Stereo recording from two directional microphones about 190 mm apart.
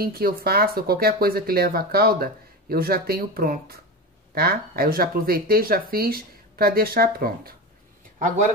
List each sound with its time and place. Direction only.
0.0 s speech: 50° right (ahead or behind)